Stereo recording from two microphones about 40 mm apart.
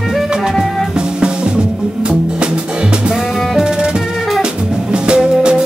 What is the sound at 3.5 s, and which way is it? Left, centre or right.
Music, centre.